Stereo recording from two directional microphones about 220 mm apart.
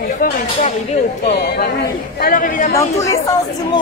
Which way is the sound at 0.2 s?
30° left (ahead or behind).